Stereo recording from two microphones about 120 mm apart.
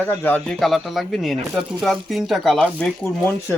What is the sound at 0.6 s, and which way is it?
Speech, centre (ahead or behind).